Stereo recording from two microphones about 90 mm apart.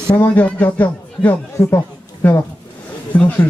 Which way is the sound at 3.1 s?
15° left (ahead or behind).